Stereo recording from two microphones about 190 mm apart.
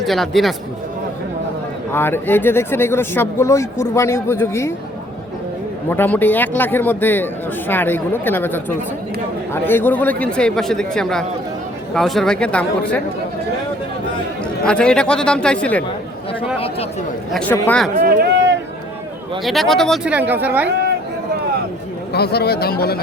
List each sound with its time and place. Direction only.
0.0 s speech: centre (ahead or behind)
1.9 s speech: 10° left (ahead or behind)
5.9 s speech: 10° left (ahead or behind)
14.6 s speech: 5° left (ahead or behind)
16.6 s speech: 30° left (ahead or behind)
17.3 s speech: 10° left (ahead or behind)
18.0 s a sound: 50° right (ahead or behind)
19.5 s speech: centre (ahead or behind)
20.1 s speech: 10° right (ahead or behind)
22.1 s speech: 55° left (ahead or behind)